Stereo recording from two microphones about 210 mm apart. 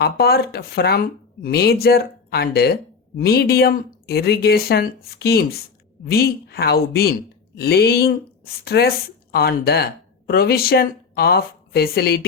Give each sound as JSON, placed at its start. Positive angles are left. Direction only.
{"t": 0.0, "sound": "speech", "side_deg": 50}